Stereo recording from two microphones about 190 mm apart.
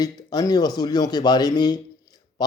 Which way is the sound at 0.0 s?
20° left (ahead or behind).